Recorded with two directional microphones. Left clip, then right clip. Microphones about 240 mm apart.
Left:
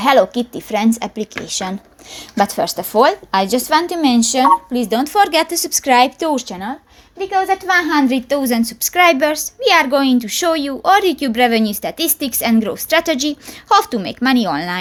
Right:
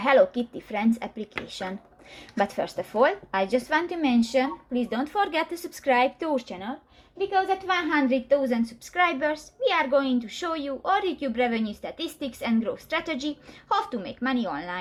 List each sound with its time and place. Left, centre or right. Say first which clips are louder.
0.0 s a woman's voice: left 8 dB; left